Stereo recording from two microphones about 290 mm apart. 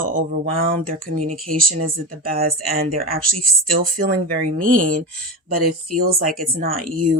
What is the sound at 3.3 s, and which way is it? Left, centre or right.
Speech, right.